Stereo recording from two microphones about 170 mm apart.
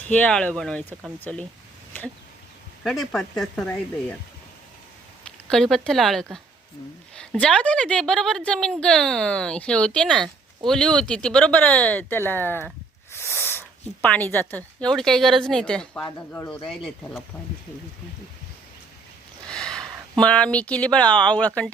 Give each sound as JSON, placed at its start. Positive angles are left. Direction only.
{"t": 0.0, "sound": "a woman's voice", "side_deg": 10}
{"t": 2.8, "sound": "a woman's voice", "side_deg": 0}
{"t": 5.5, "sound": "a woman's voice", "side_deg": 5}
{"t": 19.5, "sound": "speech", "side_deg": 5}